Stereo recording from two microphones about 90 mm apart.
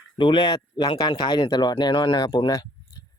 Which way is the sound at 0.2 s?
60° left (ahead or behind).